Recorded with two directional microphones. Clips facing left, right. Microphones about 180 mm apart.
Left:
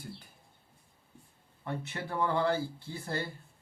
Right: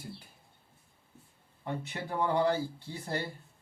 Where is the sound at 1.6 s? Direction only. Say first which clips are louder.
Right 1 dB; 15° right (ahead or behind).